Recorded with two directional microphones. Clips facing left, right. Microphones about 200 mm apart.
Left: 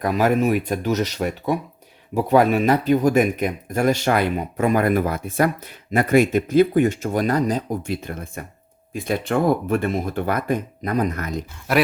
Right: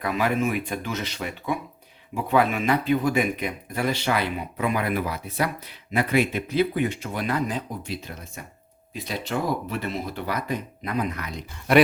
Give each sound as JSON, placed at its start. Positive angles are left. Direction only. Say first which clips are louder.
{"t": 0.0, "sound": "speech", "louder": "left 5 dB", "side_deg": 45}
{"t": 11.7, "sound": "speech", "louder": "right 2 dB", "side_deg": 0}